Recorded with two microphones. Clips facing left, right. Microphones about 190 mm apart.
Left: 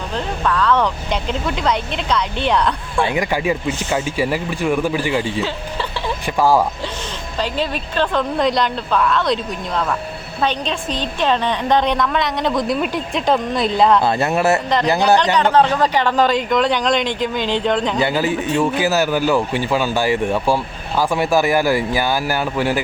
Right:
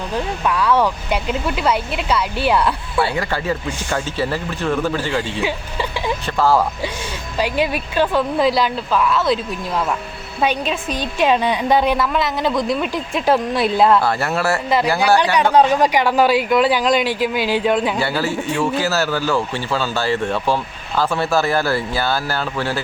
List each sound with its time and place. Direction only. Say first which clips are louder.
0.4 s speech: even; 10° right (ahead or behind)
3.0 s speech: left 2 dB; 15° left (ahead or behind)
7.3 s a woman's voice: right 3 dB; 10° right (ahead or behind)
14.0 s speech: left 3 dB; 20° left (ahead or behind)
15.2 s speech: even; 10° right (ahead or behind)
18.0 s speech: left 2 dB; 15° left (ahead or behind)